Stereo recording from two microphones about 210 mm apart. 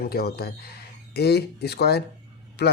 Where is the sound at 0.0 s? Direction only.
50° left (ahead or behind).